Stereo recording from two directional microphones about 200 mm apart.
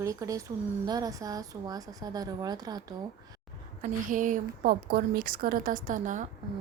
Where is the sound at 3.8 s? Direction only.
40° right (ahead or behind).